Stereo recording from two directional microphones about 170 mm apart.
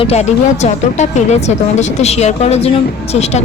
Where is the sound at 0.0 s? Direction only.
40° left (ahead or behind).